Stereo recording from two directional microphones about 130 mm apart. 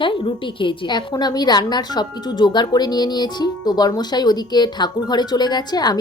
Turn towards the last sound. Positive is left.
turn(degrees=30)  # may be behind; listen again after turning